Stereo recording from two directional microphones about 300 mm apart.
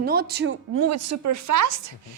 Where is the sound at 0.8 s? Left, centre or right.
Right.